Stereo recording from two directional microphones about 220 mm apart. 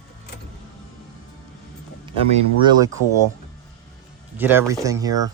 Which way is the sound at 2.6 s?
15° right (ahead or behind).